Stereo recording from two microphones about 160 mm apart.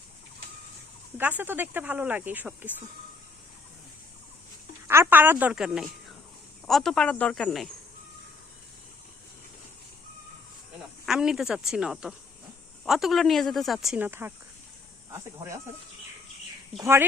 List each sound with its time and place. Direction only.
1.2 s speech: 10° right (ahead or behind)
4.9 s a woman's voice: 15° right (ahead or behind); by 7.7 s centre (ahead or behind)
11.0 s a woman's voice: 5° right (ahead or behind)
14.0 s speech: 15° right (ahead or behind)
16.7 s speech: 15° right (ahead or behind)